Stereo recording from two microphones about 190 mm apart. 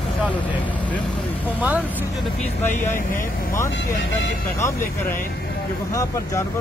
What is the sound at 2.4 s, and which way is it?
Speech, 40° left (ahead or behind).